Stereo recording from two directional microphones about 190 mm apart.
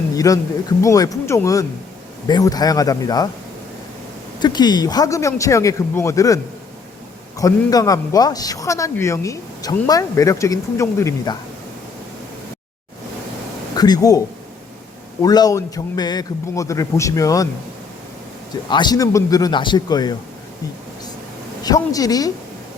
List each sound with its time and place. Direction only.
0.3 s a man's voice: 20° left (ahead or behind)
4.4 s a man's voice: 20° left (ahead or behind)
13.7 s speech: 20° left (ahead or behind)
15.2 s a man's voice: 20° left (ahead or behind)
18.7 s a man's voice: 20° left (ahead or behind)
21.6 s a man's voice: 20° left (ahead or behind)